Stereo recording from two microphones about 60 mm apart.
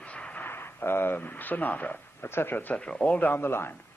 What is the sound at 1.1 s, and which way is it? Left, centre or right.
A man's voice, left.